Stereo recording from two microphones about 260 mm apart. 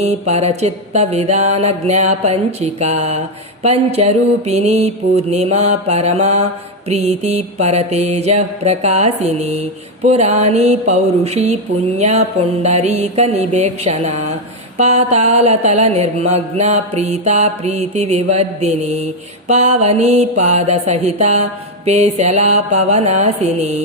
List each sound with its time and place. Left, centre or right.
0.0 s mantra: right